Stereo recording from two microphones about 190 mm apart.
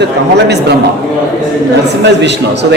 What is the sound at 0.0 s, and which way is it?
Speech, 60° right (ahead or behind).